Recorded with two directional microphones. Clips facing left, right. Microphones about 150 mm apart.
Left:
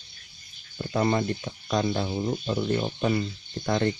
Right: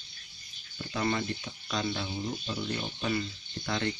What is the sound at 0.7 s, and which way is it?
Speech, 40° left (ahead or behind).